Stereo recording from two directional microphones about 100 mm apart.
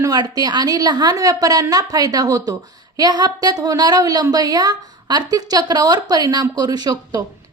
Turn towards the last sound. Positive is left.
turn(degrees=-45)  # may be behind; listen again after turning